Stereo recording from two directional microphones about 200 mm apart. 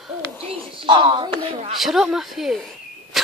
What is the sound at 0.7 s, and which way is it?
Speech, 25° right (ahead or behind).